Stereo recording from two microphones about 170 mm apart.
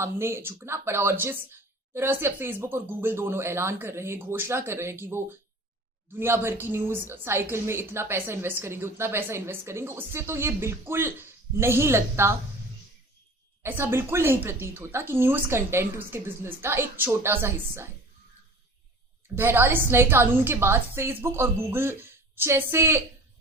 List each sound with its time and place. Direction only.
0.0 s a woman's voice: 15° right (ahead or behind)
13.6 s a woman's voice: 15° right (ahead or behind)
19.4 s a woman's voice: 15° right (ahead or behind)